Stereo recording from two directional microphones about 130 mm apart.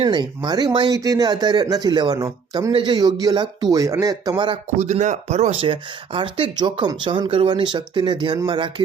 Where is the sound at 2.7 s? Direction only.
40° right (ahead or behind).